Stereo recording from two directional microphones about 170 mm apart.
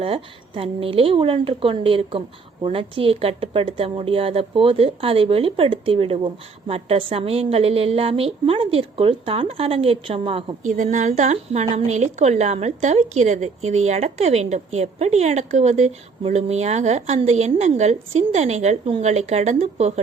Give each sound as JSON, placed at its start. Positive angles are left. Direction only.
{"t": 0.0, "sound": "a woman's voice", "side_deg": -35}
{"t": 10.6, "sound": "a woman's voice", "side_deg": -45}